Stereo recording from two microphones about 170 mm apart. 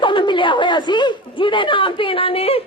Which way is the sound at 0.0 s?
30° left (ahead or behind).